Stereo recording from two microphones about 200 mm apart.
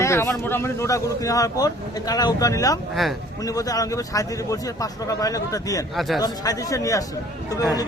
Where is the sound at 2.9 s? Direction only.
Centre (ahead or behind).